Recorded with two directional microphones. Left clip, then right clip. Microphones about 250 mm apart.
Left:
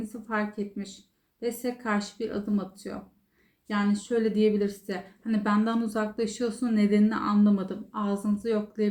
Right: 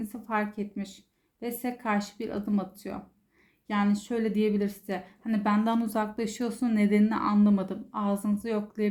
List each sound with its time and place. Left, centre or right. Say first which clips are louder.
0.1 s a woman's voice: right 1 dB; right